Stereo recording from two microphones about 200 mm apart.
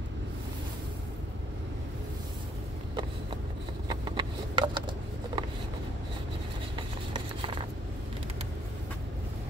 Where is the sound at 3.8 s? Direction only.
25° right (ahead or behind).